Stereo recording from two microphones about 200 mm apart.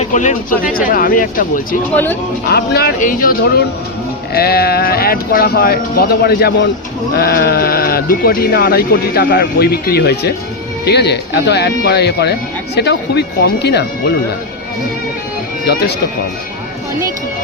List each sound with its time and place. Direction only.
0.0 s speech: 35° left (ahead or behind); by 13.8 s 55° left (ahead or behind)
15.6 s speech: 55° left (ahead or behind)